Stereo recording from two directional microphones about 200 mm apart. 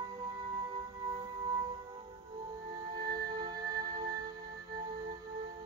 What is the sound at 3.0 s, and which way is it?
Music, 20° right (ahead or behind).